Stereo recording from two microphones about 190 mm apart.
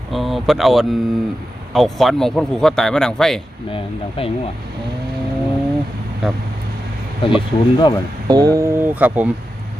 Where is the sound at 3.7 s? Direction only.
30° left (ahead or behind).